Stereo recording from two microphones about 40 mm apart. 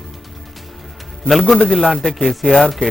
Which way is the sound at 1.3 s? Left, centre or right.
Centre.